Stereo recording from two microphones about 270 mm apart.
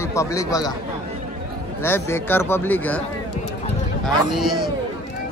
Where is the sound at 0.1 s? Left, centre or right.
Centre.